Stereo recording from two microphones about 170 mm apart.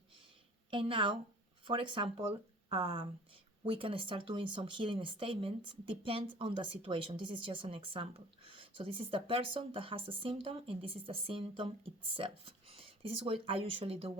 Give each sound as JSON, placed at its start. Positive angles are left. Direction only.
{"t": 0.7, "sound": "speech", "side_deg": -30}